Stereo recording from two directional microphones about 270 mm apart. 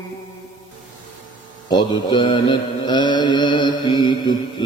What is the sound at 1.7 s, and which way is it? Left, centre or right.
Mantra, centre.